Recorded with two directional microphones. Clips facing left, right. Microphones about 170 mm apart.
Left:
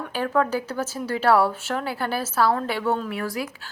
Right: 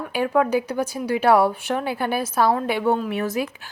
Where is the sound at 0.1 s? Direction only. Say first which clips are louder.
Right 3 dB; 15° right (ahead or behind).